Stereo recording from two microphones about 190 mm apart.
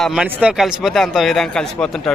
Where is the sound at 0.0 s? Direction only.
5° right (ahead or behind).